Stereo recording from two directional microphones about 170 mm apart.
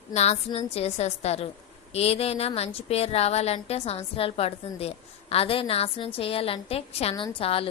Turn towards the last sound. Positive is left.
turn(degrees=35)  # may be behind; listen again after turning